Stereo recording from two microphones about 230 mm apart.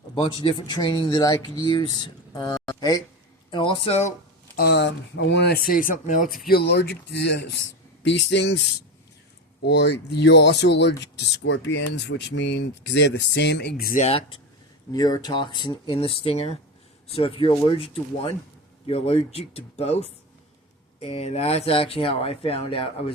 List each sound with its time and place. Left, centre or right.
0.1 s speech: left
4.5 s speech: left
6.2 s speech: centre
6.5 s speech: left
9.6 s speech: left